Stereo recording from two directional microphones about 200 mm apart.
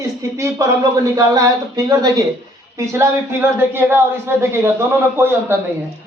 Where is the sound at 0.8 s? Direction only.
15° right (ahead or behind).